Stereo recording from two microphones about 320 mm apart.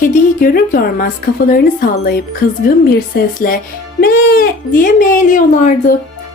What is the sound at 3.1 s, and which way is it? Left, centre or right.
Speech, left.